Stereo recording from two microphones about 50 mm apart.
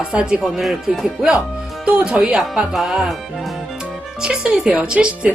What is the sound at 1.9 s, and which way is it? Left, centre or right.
A woman's voice, centre.